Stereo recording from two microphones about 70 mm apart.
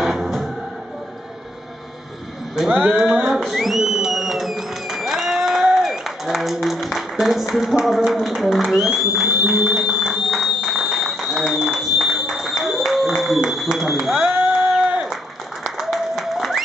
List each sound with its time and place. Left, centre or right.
0.0 s music: centre
2.7 s music: right
3.3 s a sound: centre
15.6 s applause: centre